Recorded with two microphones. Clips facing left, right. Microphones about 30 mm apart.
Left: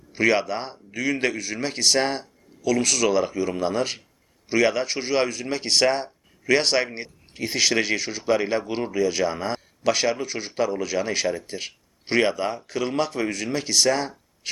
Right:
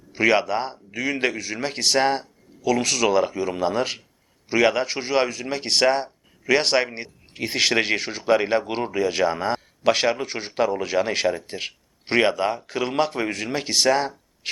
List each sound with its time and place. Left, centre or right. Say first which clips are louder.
0.3 s speech: right 2 dB; centre
0.9 s speech: even; right
2.6 s speech: right 1 dB; right
4.9 s speech: right 1 dB; centre
7.3 s speech: right 1 dB; right
8.2 s speech: right 4 dB; right
9.2 s speech: right 3 dB; centre
9.8 s speech: right 2 dB; right
10.5 s speech: right 3 dB; right